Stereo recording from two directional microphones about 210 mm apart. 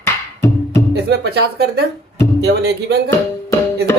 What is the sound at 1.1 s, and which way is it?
Speech, 50° right (ahead or behind).